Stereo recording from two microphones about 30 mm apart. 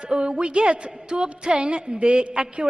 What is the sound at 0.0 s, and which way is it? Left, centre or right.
A woman's voice, right.